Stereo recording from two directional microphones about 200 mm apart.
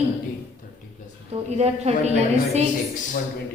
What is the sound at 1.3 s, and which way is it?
Speech, 30° right (ahead or behind).